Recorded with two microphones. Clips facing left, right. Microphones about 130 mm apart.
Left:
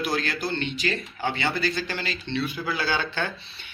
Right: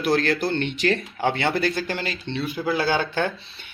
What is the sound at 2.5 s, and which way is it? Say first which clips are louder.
Speech: right 5 dB; 25° right (ahead or behind).